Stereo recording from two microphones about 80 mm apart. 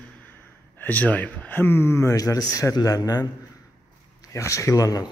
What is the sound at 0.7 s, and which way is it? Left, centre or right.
Speech, left.